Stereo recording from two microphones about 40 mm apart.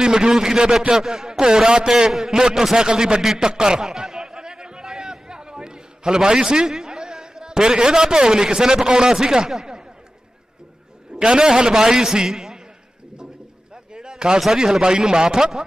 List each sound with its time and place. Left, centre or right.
0.0 s a man's voice: centre
3.2 s a man's voice: centre
3.4 s a sound: centre
11.1 s a man's voice: centre
13.9 s a sound: centre
14.6 s a man's voice: centre